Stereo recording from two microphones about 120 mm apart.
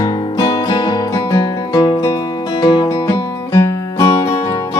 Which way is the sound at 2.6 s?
40° left (ahead or behind).